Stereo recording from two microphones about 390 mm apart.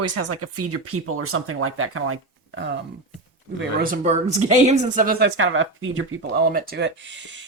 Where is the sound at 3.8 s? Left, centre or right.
Centre.